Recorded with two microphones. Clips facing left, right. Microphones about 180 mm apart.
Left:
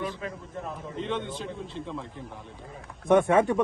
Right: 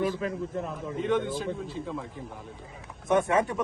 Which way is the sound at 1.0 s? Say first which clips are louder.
Right 6 dB; 5° right (ahead or behind).